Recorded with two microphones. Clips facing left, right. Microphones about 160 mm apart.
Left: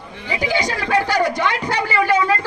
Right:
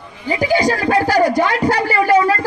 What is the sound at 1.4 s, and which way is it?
A man's voice, 40° right (ahead or behind).